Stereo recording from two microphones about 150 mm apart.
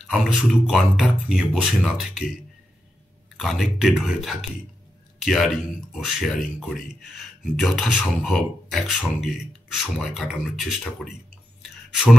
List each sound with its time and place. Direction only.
0.0 s speech: centre (ahead or behind)
3.3 s speech: centre (ahead or behind)